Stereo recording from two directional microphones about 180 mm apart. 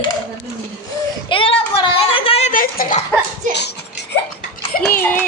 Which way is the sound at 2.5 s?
50° left (ahead or behind).